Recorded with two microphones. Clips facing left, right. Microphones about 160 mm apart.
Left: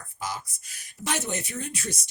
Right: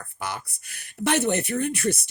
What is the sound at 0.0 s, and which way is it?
Speech, 60° right (ahead or behind).